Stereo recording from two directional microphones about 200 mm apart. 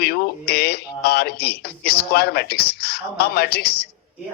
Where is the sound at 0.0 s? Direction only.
50° left (ahead or behind).